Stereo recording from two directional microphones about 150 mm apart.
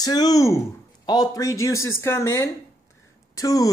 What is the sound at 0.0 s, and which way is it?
Speech, 25° left (ahead or behind).